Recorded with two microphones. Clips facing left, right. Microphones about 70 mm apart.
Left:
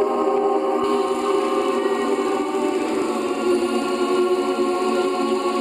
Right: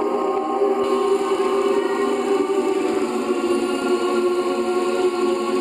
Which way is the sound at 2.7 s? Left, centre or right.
Centre.